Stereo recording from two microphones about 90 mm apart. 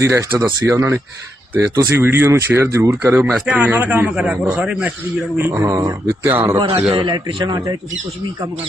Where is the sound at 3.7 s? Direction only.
25° right (ahead or behind).